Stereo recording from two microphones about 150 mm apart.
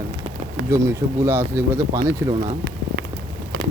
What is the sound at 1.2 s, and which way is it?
Speech, 15° right (ahead or behind).